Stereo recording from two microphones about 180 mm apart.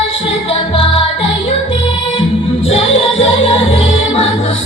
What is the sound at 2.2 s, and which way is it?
Music, 35° left (ahead or behind).